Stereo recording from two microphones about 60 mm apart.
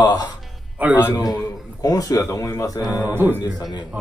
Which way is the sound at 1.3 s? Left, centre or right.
Left.